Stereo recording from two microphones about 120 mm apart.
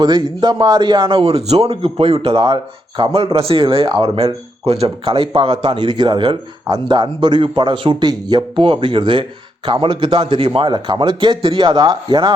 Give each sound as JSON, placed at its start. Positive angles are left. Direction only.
{"t": 0.0, "sound": "speech", "side_deg": -40}